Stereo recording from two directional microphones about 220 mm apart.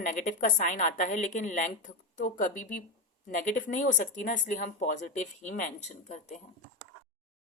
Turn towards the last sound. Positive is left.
turn(degrees=30)  # may be behind; listen again after turning